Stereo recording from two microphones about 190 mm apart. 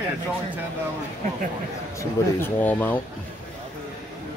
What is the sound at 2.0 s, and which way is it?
Speech, 10° left (ahead or behind).